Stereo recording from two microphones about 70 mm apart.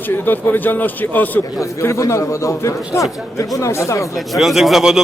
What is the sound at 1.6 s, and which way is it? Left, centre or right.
A man's voice, left.